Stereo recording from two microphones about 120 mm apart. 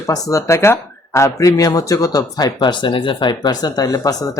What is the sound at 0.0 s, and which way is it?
Speech, 25° left (ahead or behind).